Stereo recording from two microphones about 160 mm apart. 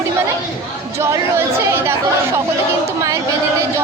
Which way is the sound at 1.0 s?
15° right (ahead or behind).